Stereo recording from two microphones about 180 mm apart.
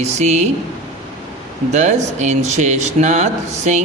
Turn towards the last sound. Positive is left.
turn(degrees=-40)  # may be behind; listen again after turning